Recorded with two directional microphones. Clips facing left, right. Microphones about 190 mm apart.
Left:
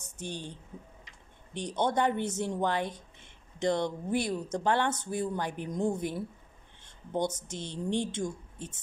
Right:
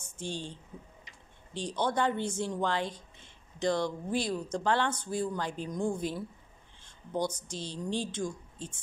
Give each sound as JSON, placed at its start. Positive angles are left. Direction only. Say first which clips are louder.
{"t": 0.0, "sound": "speech", "louder": "right 1 dB", "side_deg": 20}